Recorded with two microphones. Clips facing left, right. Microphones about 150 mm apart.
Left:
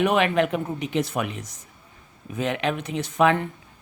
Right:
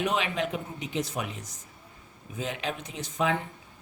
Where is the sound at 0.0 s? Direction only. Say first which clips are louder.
Left 8 dB; 60° left (ahead or behind).